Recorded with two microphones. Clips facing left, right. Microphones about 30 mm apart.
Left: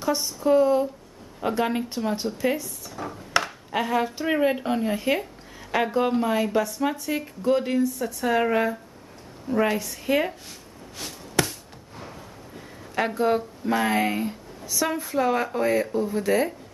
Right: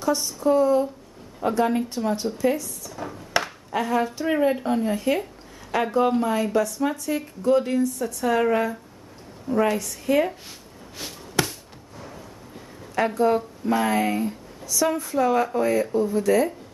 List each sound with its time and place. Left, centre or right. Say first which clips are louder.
0.0 s speech: right 2 dB; centre
1.8 s speech: right 2 dB; centre
2.3 s speech: right 2 dB; left
3.0 s a sound: left 1 dB; centre
3.7 s speech: right 1 dB; centre
11.0 s a sound: even; centre
12.0 s a sound: even; centre
12.9 s speech: right 2 dB; centre
16.2 s speech: right 2 dB; centre